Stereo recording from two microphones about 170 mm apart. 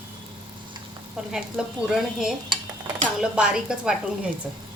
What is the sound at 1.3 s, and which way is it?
A woman's voice, centre (ahead or behind).